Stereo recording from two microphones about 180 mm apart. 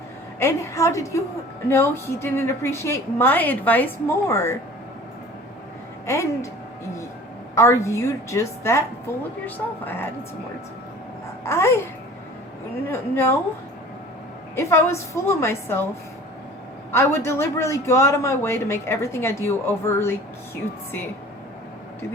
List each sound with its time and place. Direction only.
0.3 s speech: 15° left (ahead or behind)
6.1 s speech: 15° left (ahead or behind)
7.5 s speech: 15° left (ahead or behind)
9.8 s speech: 10° left (ahead or behind)
11.4 s speech: 15° left (ahead or behind)
12.9 s speech: 15° left (ahead or behind)
14.5 s speech: 15° left (ahead or behind)
16.9 s speech: 15° left (ahead or behind)